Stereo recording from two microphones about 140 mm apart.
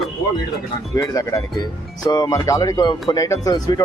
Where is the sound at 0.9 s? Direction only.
25° left (ahead or behind).